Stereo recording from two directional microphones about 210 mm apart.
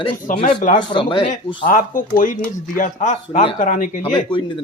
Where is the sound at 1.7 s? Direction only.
40° left (ahead or behind).